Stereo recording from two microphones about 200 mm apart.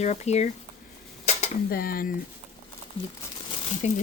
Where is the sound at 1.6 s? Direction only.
50° left (ahead or behind).